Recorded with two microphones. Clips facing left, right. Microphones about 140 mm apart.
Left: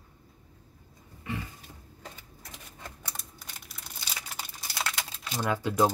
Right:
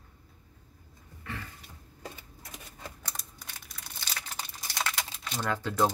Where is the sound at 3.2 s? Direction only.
Centre (ahead or behind).